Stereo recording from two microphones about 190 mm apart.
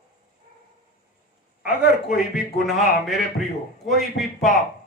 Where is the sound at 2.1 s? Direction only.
Centre (ahead or behind).